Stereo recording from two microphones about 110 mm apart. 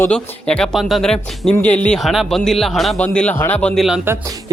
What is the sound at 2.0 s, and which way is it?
Speech, centre (ahead or behind).